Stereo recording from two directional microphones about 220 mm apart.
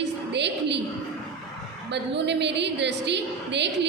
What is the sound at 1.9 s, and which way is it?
A woman's voice, 50° right (ahead or behind).